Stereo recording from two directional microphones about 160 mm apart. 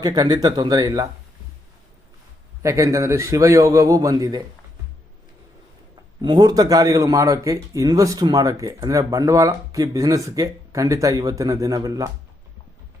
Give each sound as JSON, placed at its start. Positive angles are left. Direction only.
{"t": 0.0, "sound": "a man's voice", "side_deg": -25}
{"t": 2.6, "sound": "a man's voice", "side_deg": -20}
{"t": 6.2, "sound": "a man's voice", "side_deg": -25}